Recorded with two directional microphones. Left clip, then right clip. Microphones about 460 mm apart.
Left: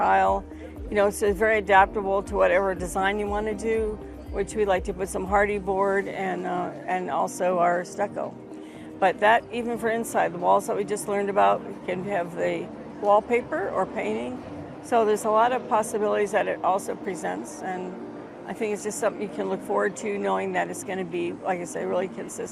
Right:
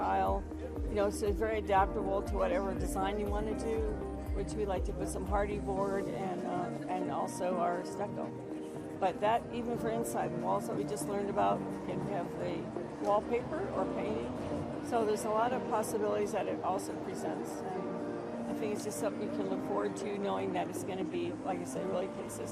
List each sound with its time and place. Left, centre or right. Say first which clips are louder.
0.0 s music: left 11 dB; left
0.9 s speech: left 11 dB; left
4.4 s speech: left 13 dB; left
14.8 s speech: left 11 dB; left
18.6 s speech: left 11 dB; left